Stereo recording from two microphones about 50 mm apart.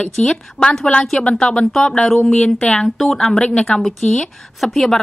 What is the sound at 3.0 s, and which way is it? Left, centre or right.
A woman's voice, centre.